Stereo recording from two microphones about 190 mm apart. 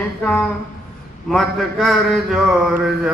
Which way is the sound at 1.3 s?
Centre (ahead or behind).